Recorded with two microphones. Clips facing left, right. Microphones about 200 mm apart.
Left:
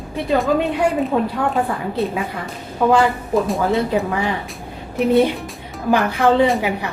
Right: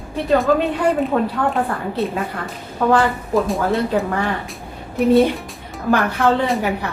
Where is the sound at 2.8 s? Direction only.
15° left (ahead or behind).